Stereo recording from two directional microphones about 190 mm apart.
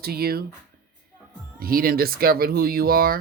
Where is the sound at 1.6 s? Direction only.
50° right (ahead or behind).